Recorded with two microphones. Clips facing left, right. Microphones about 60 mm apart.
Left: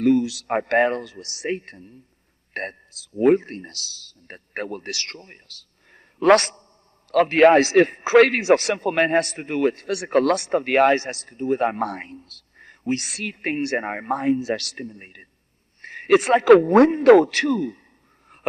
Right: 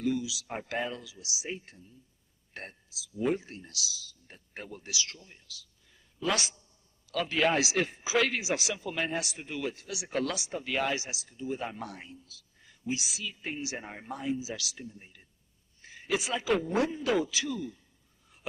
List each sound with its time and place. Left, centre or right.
0.0 s a man's voice: left